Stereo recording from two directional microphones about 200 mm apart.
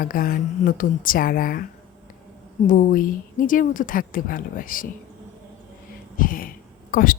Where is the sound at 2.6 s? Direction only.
40° left (ahead or behind).